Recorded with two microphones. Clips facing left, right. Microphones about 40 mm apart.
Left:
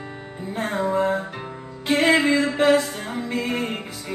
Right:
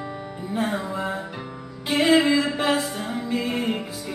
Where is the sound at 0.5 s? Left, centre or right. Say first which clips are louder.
Left 4 dB; left.